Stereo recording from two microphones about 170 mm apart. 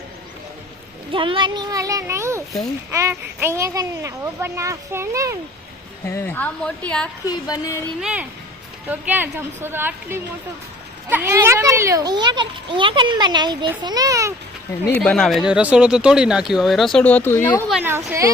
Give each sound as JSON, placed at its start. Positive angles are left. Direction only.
{"t": 1.1, "sound": "a child's voice", "side_deg": -30}
{"t": 6.1, "sound": "a woman's voice", "side_deg": 15}
{"t": 7.3, "sound": "music", "side_deg": 20}
{"t": 8.0, "sound": "a child's voice", "side_deg": -5}
{"t": 14.9, "sound": "speech", "side_deg": 5}